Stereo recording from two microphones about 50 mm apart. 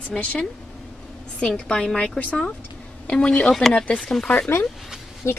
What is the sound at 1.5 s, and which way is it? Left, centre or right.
A woman's voice, centre.